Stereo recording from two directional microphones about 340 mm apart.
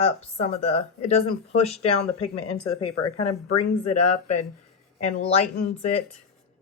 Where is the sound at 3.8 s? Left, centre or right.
Centre.